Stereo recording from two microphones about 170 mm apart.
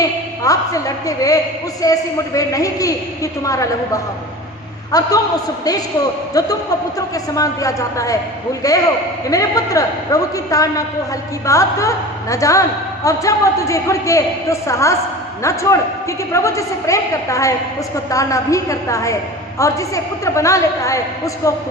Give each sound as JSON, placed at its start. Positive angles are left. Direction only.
{"t": 0.4, "sound": "a man's voice", "side_deg": 20}
{"t": 6.3, "sound": "a man's voice", "side_deg": 20}